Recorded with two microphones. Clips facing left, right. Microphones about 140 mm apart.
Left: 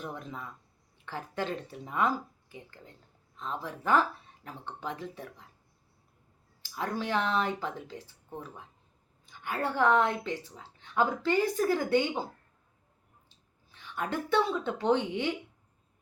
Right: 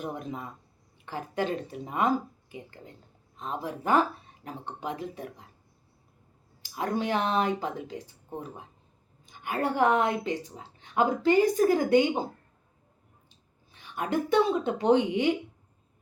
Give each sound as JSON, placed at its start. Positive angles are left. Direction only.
{"t": 0.0, "sound": "speech", "side_deg": -15}
{"t": 6.6, "sound": "a woman's voice", "side_deg": -15}